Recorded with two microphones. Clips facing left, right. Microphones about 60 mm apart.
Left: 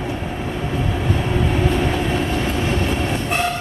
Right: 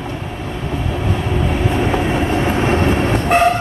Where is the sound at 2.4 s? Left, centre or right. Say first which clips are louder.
Right 5 dB; right.